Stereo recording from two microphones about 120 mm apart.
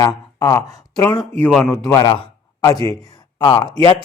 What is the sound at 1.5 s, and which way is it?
Speech, 5° left (ahead or behind).